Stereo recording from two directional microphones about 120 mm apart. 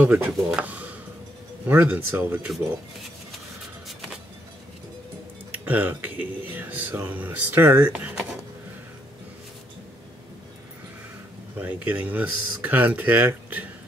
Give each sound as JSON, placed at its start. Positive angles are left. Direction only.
{"t": 0.0, "sound": "speech", "side_deg": -10}
{"t": 5.7, "sound": "speech", "side_deg": -15}
{"t": 11.5, "sound": "speech", "side_deg": -15}